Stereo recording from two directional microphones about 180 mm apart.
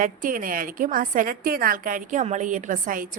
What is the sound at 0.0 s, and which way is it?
A woman's voice, 50° right (ahead or behind).